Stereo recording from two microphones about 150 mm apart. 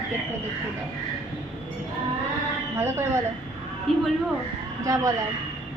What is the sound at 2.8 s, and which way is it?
Speech, 15° right (ahead or behind).